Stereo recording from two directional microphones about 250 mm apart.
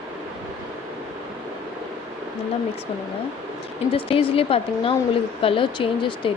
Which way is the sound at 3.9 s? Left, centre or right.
Left.